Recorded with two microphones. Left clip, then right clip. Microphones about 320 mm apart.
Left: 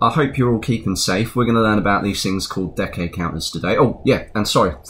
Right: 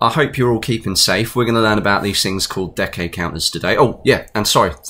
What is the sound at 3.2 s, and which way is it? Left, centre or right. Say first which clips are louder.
Speech: right 4 dB; right.